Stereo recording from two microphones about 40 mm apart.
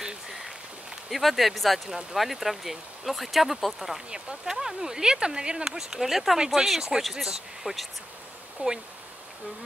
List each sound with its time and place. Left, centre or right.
0.0 s a sound: centre
1.1 s speech: centre
4.1 s speech: centre
8.6 s speech: right